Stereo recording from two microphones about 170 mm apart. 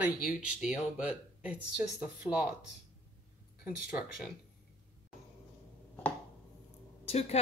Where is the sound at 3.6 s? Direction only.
5° right (ahead or behind).